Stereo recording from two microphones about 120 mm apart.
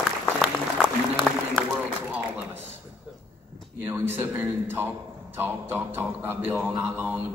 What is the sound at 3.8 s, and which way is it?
A man's voice, 20° right (ahead or behind).